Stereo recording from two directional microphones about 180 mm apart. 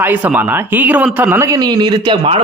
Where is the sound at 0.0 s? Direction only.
10° right (ahead or behind).